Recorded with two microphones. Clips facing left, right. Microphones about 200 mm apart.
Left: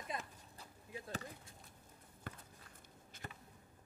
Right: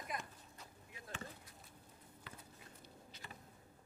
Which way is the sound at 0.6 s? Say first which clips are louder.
Left 9 dB; 30° left (ahead or behind).